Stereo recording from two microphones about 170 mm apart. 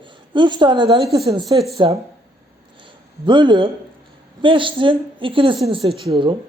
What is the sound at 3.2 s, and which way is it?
A woman's voice, 30° right (ahead or behind).